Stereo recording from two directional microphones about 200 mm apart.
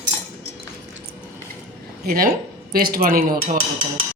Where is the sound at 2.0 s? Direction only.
45° right (ahead or behind).